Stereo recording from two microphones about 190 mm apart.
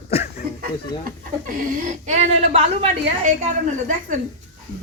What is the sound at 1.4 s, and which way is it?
A woman's voice, 45° right (ahead or behind).